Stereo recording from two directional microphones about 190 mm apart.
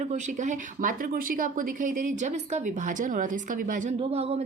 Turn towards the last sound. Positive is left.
turn(degrees=-35)  # may be behind; listen again after turning